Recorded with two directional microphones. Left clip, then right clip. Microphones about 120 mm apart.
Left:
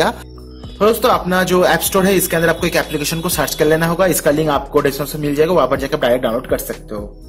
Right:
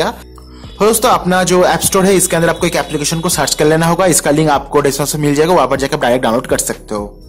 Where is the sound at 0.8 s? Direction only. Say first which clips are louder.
Right 2 dB; 35° right (ahead or behind); by 3.6 s 20° right (ahead or behind).